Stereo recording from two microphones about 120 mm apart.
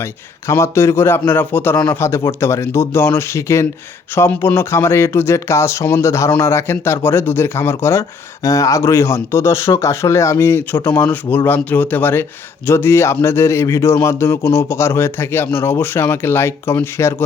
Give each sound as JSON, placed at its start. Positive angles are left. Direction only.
{"t": 0.0, "sound": "speech", "side_deg": 20}